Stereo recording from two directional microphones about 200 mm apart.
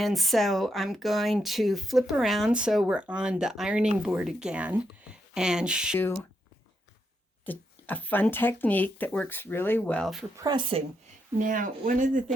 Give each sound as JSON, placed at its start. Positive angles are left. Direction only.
{"t": 0.0, "sound": "speech", "side_deg": 0}
{"t": 7.4, "sound": "speech", "side_deg": 10}
{"t": 10.3, "sound": "speech", "side_deg": -20}
{"t": 11.4, "sound": "speech", "side_deg": -40}